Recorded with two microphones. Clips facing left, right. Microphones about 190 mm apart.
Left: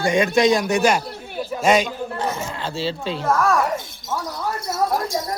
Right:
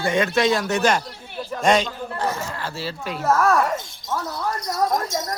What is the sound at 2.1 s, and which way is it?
Speech, 20° left (ahead or behind).